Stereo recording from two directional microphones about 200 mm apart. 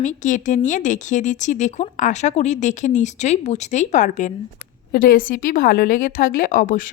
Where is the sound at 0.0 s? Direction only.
40° left (ahead or behind).